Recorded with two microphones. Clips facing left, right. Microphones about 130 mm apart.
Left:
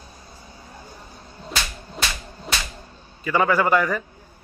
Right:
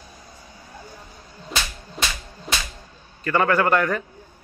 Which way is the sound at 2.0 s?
Centre (ahead or behind).